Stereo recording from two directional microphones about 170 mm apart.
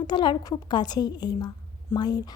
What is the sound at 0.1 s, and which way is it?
A woman's voice, 25° left (ahead or behind).